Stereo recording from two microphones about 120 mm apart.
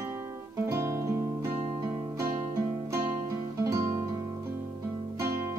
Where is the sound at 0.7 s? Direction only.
25° right (ahead or behind).